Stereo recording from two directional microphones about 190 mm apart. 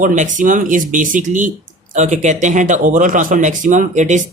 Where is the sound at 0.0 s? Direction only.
45° right (ahead or behind).